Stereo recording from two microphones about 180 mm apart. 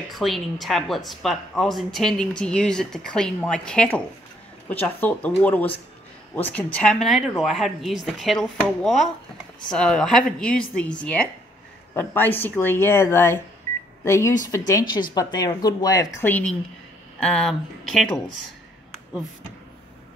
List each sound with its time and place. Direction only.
0.1 s a woman's voice: centre (ahead or behind)